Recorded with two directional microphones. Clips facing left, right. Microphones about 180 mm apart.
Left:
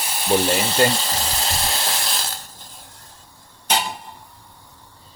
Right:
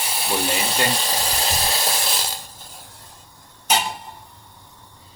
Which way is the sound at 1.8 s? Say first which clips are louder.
Right 1 dB; 5° right (ahead or behind).